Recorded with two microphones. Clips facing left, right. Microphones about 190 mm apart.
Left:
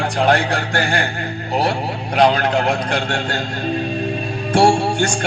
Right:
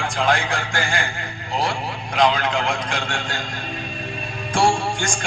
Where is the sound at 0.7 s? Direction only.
65° left (ahead or behind).